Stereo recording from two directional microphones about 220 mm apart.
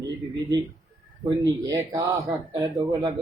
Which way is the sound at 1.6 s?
15° right (ahead or behind).